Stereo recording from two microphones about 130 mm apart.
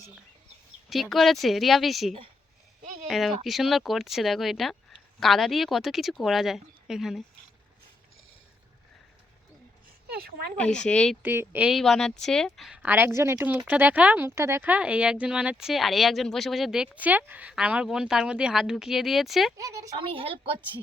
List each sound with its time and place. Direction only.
1.1 s a woman's voice: centre (ahead or behind)
10.6 s speech: 5° left (ahead or behind)
11.2 s speech: 15° right (ahead or behind)
11.7 s a woman's voice: centre (ahead or behind)
20.0 s a woman's voice: 45° right (ahead or behind)